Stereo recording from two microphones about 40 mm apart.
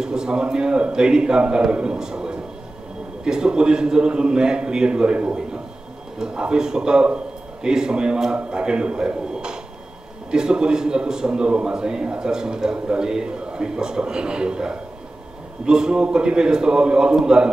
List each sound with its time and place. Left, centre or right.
0.0 s a man's voice: centre